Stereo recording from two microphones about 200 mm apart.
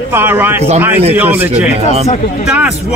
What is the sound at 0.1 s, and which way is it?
A man's voice, 10° right (ahead or behind).